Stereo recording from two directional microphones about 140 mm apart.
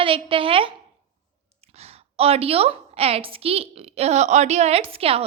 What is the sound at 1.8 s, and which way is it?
A woman's voice, 45° right (ahead or behind).